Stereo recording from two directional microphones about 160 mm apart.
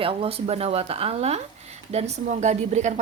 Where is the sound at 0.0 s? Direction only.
35° right (ahead or behind).